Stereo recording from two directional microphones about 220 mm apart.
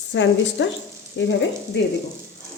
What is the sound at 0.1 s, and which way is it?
Speech, 55° left (ahead or behind).